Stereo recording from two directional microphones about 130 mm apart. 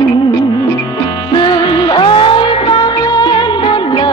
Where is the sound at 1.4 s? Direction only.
35° left (ahead or behind).